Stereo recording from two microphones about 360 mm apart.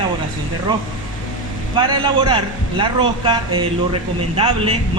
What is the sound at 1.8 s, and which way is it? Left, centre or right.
Speech, centre.